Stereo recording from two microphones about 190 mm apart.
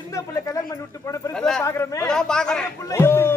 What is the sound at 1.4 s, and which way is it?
Speech, 5° left (ahead or behind).